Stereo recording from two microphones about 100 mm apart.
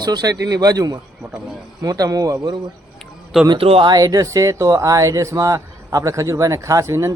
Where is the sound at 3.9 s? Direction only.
40° right (ahead or behind).